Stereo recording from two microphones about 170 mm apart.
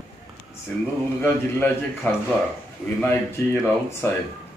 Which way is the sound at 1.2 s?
10° left (ahead or behind).